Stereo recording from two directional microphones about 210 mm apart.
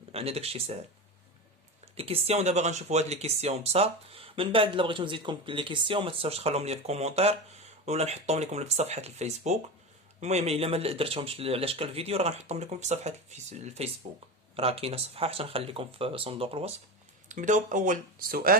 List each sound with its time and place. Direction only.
0.1 s speech: 30° right (ahead or behind)
1.8 s speech: 30° right (ahead or behind); by 18.5 s 45° right (ahead or behind)